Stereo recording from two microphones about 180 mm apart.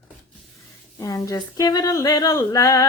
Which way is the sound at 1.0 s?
20° left (ahead or behind).